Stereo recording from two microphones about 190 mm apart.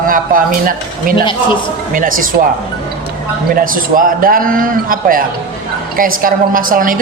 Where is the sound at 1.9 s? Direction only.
45° right (ahead or behind).